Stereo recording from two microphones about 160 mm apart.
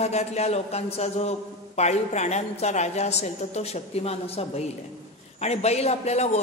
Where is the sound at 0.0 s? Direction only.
45° left (ahead or behind).